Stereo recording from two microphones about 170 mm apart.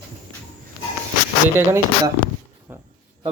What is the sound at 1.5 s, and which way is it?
Speech, 15° right (ahead or behind).